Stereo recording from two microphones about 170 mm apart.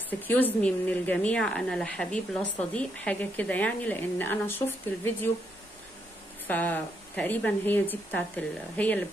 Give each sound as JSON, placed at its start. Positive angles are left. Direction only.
{"t": 0.3, "sound": "a woman's voice", "side_deg": 10}
{"t": 6.4, "sound": "a woman's voice", "side_deg": 10}